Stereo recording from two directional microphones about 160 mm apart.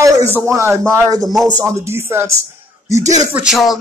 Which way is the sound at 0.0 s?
20° right (ahead or behind).